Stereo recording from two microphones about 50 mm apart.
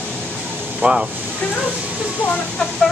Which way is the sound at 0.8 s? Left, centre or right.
Right.